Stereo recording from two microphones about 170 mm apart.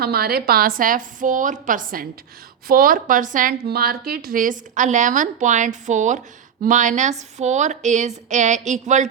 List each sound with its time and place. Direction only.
0.0 s a woman's voice: 65° right (ahead or behind); by 9.0 s 45° right (ahead or behind)